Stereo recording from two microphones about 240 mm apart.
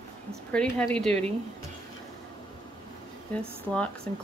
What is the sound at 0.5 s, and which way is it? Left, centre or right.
Speech, centre.